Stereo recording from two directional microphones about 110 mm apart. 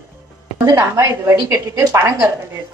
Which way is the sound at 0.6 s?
30° right (ahead or behind).